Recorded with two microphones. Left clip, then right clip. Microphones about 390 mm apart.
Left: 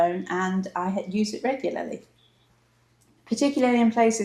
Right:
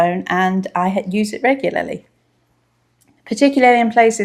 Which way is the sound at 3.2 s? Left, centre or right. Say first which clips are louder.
Right 11 dB; right.